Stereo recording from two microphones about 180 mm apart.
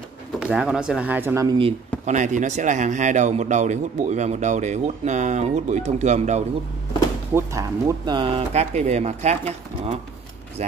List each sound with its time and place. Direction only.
0.4 s speech: 5° right (ahead or behind)
1.6 s speech: 40° right (ahead or behind)
7.3 s speech: 15° right (ahead or behind); by 9.4 s 40° right (ahead or behind)